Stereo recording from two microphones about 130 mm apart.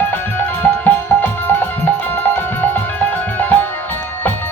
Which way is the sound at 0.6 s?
15° left (ahead or behind).